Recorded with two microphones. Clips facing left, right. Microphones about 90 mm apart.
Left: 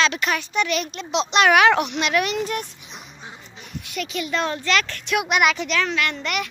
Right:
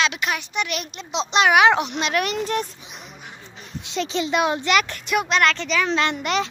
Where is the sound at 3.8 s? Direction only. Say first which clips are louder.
Right 4 dB; 25° right (ahead or behind).